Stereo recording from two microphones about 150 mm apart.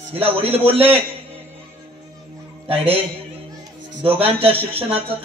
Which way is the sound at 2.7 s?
40° right (ahead or behind).